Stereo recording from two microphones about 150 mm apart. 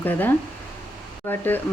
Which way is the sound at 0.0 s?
15° left (ahead or behind).